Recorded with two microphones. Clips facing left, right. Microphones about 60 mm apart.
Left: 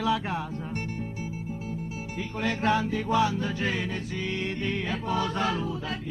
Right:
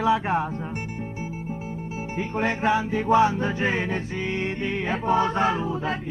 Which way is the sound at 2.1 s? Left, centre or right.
Right.